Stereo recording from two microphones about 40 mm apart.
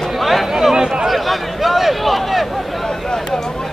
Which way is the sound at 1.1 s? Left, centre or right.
Centre.